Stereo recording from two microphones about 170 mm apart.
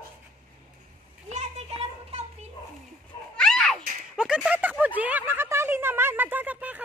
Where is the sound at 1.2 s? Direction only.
40° right (ahead or behind).